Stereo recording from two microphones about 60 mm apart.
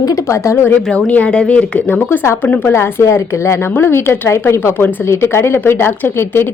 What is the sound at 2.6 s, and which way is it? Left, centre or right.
A woman's voice, left.